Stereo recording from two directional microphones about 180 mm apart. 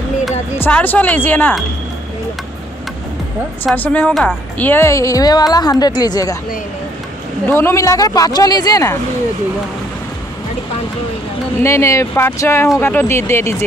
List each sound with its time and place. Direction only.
0.6 s speech: 10° left (ahead or behind)
3.6 s a woman's voice: 10° left (ahead or behind)
7.5 s a woman's voice: 15° left (ahead or behind)
11.6 s speech: 15° left (ahead or behind)